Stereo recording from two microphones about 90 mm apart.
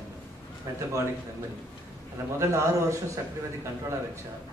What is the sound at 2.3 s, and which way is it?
Speech, 35° right (ahead or behind).